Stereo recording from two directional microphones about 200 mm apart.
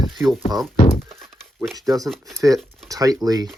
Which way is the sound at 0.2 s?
15° right (ahead or behind).